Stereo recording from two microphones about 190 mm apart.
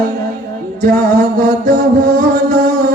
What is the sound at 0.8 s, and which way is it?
Music, 45° right (ahead or behind).